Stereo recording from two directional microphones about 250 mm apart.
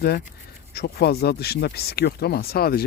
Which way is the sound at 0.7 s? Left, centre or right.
Left.